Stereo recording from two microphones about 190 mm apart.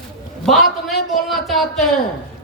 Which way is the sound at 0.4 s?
Centre (ahead or behind).